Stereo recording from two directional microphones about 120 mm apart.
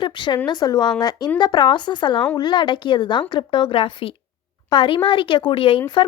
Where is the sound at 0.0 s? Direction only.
40° left (ahead or behind).